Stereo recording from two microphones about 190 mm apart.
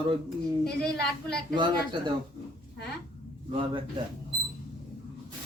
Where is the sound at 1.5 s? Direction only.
25° right (ahead or behind).